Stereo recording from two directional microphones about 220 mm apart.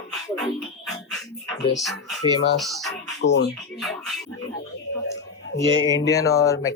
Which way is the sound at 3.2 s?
50° left (ahead or behind).